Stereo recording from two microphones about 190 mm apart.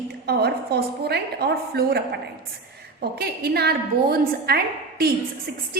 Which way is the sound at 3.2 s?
55° right (ahead or behind).